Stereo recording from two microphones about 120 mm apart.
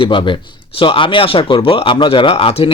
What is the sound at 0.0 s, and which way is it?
Speech, 45° left (ahead or behind).